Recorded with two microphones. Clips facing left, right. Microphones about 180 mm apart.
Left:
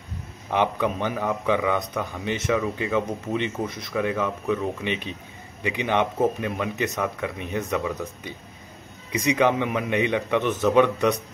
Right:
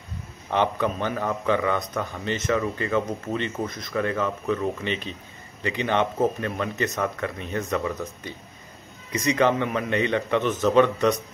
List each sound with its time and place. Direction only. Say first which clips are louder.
0.5 s speech: even; 10° left (ahead or behind)
2.2 s speech: even; 15° left (ahead or behind)
7.8 s speech: even; centre (ahead or behind)
9.1 s speech: even; 15° left (ahead or behind)